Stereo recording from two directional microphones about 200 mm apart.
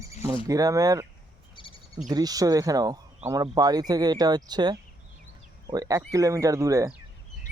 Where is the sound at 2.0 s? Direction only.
20° right (ahead or behind).